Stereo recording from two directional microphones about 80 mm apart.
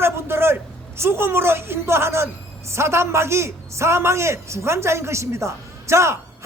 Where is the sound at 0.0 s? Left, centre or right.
Right.